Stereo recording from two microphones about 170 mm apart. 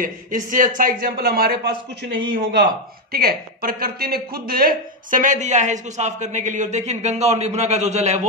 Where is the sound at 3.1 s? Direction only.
65° right (ahead or behind); by 8.2 s 40° right (ahead or behind).